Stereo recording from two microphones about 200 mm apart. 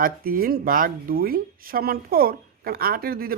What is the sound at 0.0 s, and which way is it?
Speech, 45° right (ahead or behind).